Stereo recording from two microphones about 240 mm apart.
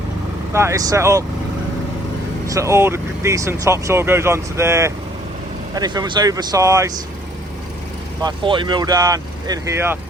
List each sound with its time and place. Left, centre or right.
0.5 s speech: centre
2.5 s speech: centre
8.2 s speech: centre